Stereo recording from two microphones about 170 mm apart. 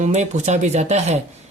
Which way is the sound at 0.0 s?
45° right (ahead or behind).